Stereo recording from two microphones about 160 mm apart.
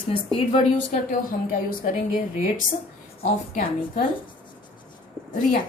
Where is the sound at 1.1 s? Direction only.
60° left (ahead or behind).